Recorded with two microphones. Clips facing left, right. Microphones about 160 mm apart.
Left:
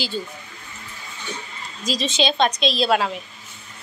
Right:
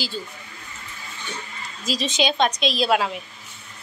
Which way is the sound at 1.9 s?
10° right (ahead or behind).